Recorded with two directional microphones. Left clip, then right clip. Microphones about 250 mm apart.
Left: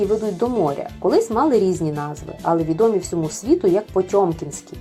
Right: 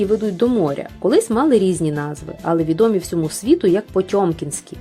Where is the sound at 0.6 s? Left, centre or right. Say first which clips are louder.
Right 1 dB; right.